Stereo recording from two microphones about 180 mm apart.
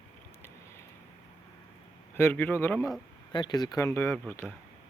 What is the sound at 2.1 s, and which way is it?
Speech, 10° left (ahead or behind).